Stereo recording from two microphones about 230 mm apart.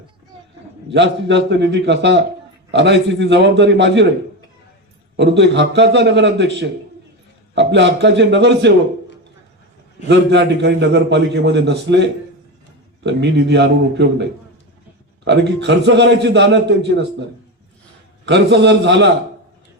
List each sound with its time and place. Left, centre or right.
0.9 s a man's voice: right
5.1 s a man's voice: right
10.1 s a man's voice: right
18.3 s a man's voice: right